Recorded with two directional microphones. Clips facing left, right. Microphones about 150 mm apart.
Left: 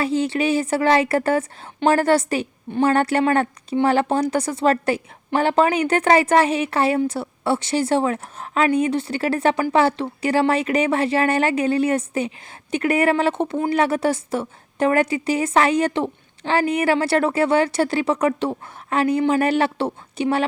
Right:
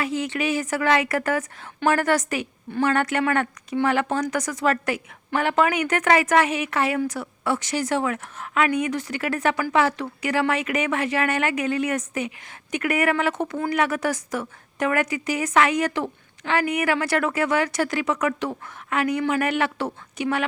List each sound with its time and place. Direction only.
0.0 s a woman's voice: 30° left (ahead or behind)